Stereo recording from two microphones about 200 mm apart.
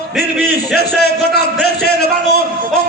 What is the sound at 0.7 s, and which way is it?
A man's voice, 55° left (ahead or behind).